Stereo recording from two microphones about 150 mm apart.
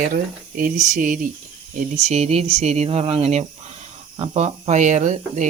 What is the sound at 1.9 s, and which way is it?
Speech, 50° right (ahead or behind).